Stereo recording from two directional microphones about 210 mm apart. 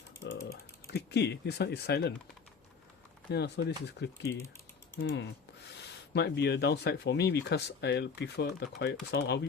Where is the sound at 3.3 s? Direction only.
50° left (ahead or behind).